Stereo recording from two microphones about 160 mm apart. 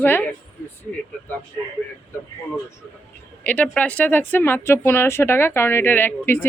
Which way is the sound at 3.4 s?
10° left (ahead or behind).